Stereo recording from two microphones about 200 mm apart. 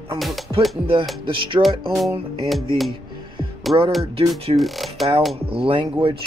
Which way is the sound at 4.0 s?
30° right (ahead or behind).